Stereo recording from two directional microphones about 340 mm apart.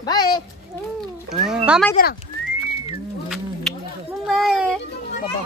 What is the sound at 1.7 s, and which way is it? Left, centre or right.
Speech, centre.